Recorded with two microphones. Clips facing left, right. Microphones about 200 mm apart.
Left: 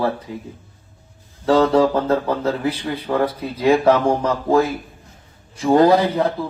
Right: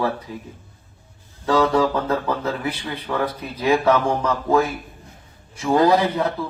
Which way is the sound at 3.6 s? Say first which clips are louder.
Left 3 dB; 30° left (ahead or behind).